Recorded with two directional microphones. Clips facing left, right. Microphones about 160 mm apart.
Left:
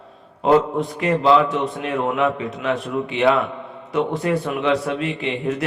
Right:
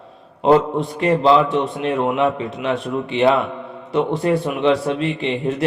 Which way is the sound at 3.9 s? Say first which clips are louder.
Right 3 dB; 30° right (ahead or behind).